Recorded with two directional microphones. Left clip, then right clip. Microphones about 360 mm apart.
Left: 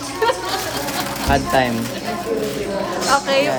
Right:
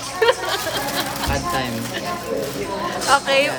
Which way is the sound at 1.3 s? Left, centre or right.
Centre.